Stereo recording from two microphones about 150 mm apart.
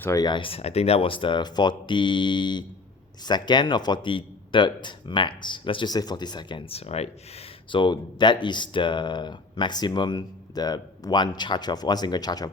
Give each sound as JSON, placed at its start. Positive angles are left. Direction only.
{"t": 0.0, "sound": "speech", "side_deg": 25}